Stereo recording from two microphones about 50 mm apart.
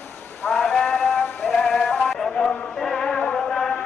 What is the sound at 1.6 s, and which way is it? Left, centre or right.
Music, centre.